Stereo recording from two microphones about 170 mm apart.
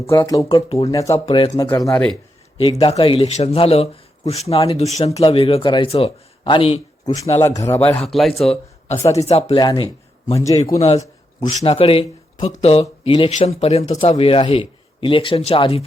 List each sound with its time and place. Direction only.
0.0 s speech: 20° left (ahead or behind)
0.7 s a man's voice: 35° left (ahead or behind)
0.9 s speech: 20° left (ahead or behind)
1.2 s a man's voice: 35° left (ahead or behind)
1.9 s a man's voice: 10° left (ahead or behind)
2.6 s a man's voice: 30° left (ahead or behind)
7.4 s a man's voice: 20° left (ahead or behind); by 8.4 s centre (ahead or behind)
9.1 s a man's voice: 35° left (ahead or behind)
10.3 s speech: 20° left (ahead or behind)
10.8 s a man's voice: 40° left (ahead or behind)